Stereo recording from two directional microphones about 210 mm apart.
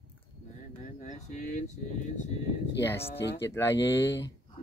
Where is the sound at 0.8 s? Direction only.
35° left (ahead or behind).